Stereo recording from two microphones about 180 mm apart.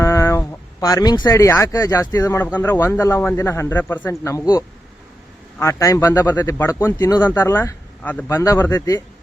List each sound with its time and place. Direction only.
0.0 s speech: 15° left (ahead or behind)